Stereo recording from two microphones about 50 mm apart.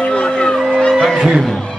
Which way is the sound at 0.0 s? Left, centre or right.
Centre.